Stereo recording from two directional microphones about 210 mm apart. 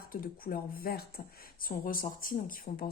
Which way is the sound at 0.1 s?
45° left (ahead or behind).